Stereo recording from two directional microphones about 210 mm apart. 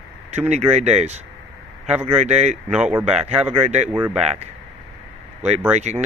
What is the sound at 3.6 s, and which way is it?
Speech, 35° right (ahead or behind).